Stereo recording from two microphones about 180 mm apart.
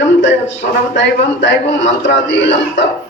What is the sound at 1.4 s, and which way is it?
A man's voice, 90° left.